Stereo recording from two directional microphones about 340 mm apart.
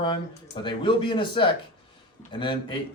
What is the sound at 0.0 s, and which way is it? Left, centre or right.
Speech, centre.